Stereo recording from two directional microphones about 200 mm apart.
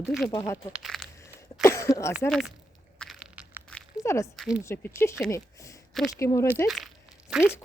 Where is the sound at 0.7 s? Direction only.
Centre (ahead or behind).